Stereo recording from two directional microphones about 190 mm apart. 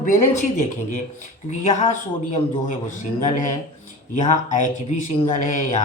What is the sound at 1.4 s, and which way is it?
Speech, 40° left (ahead or behind).